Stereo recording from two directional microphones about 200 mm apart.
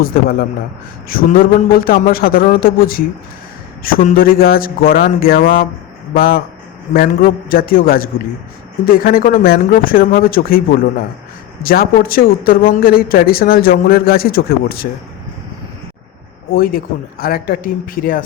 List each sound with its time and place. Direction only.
0.0 s a man's voice: 50° left (ahead or behind)
16.5 s a man's voice: 45° left (ahead or behind)